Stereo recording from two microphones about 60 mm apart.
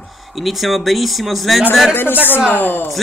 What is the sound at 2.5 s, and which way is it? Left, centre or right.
Speech, left.